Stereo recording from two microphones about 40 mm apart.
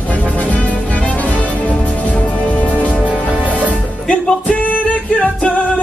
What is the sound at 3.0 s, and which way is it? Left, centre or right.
Music, right.